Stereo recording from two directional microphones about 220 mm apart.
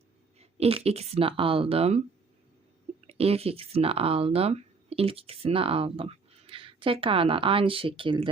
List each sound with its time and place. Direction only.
0.3 s speech: 30° right (ahead or behind)
3.1 s speech: 25° right (ahead or behind)